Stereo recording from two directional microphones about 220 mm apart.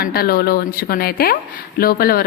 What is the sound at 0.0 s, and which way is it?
A woman's voice, 45° left (ahead or behind).